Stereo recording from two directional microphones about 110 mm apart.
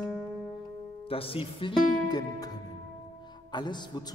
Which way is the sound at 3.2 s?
40° left (ahead or behind).